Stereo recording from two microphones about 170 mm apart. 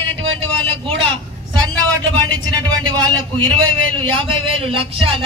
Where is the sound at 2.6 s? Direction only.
25° right (ahead or behind).